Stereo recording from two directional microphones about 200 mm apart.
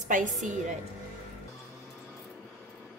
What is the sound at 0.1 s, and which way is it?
Speech, 40° right (ahead or behind).